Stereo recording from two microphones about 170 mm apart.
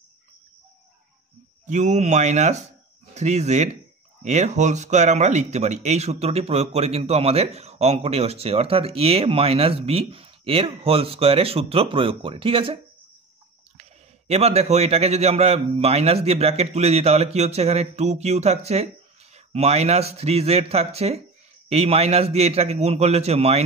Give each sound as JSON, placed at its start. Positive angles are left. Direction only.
{"t": 1.7, "sound": "speech", "side_deg": -45}
{"t": 13.7, "sound": "speech", "side_deg": -40}